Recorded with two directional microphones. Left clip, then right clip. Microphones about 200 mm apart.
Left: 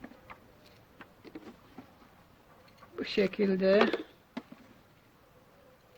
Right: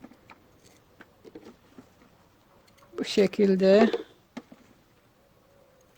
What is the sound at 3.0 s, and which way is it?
Speech, 45° right (ahead or behind).